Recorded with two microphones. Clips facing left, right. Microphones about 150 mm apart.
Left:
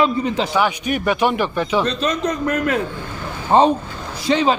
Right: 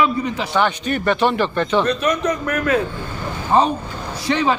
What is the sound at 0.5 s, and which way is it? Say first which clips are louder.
Speech: even; 10° left (ahead or behind).